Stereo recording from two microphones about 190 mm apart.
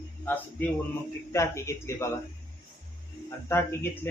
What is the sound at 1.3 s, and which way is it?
Speech, 15° left (ahead or behind).